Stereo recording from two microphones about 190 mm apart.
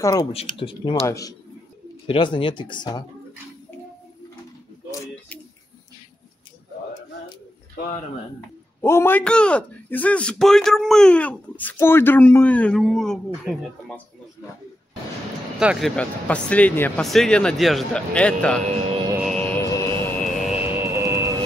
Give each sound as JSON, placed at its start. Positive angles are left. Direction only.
{"t": 0.0, "sound": "speech", "side_deg": 20}
{"t": 1.0, "sound": "a man's voice", "side_deg": 15}
{"t": 8.8, "sound": "a man's voice", "side_deg": 10}
{"t": 15.6, "sound": "speech", "side_deg": -5}
{"t": 16.0, "sound": "speech", "side_deg": 5}
{"t": 19.2, "sound": "music", "side_deg": 5}
{"t": 20.4, "sound": "music", "side_deg": -10}